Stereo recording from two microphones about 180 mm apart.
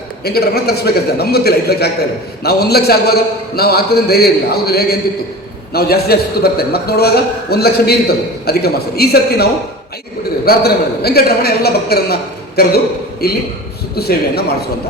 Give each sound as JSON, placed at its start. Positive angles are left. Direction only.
{"t": 0.3, "sound": "a man's voice", "side_deg": 60}